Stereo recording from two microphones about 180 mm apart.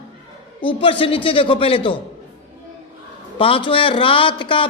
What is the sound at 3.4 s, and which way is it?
A man's voice, 30° left (ahead or behind).